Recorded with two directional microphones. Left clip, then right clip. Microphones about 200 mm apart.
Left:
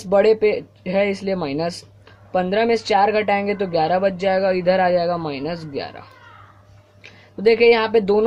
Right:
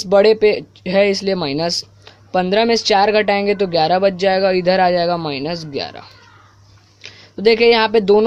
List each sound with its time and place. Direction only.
0.0 s speech: 30° right (ahead or behind)